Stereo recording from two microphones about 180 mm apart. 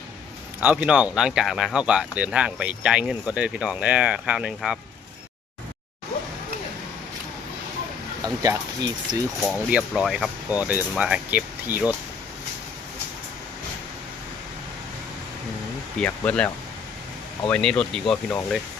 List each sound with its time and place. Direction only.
0.6 s speech: 5° right (ahead or behind)
8.2 s speech: 20° right (ahead or behind)
9.4 s speech: 5° right (ahead or behind)
16.0 s speech: 5° left (ahead or behind)
17.5 s speech: 5° left (ahead or behind)